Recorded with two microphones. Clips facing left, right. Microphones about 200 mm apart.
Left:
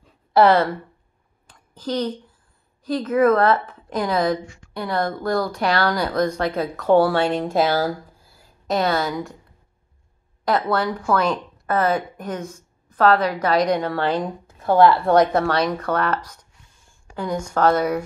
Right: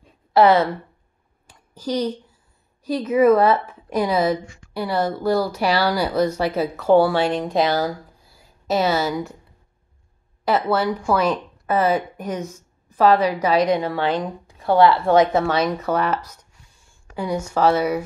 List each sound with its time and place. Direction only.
0.4 s speech: 5° right (ahead or behind)
1.5 s a sound: 10° right (ahead or behind)
2.8 s speech: 10° right (ahead or behind)
10.4 s speech: 5° right (ahead or behind)